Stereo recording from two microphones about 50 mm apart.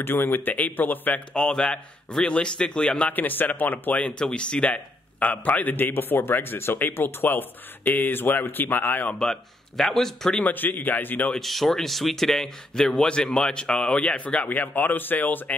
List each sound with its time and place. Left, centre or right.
0.0 s speech: left
0.6 s a man's voice: left
1.3 s a man's voice: centre
3.1 s a man's voice: left
4.2 s a man's voice: centre; by 9.1 s left
9.2 s speech: centre
10.4 s a man's voice: left
11.3 s a man's voice: centre; by 15.5 s left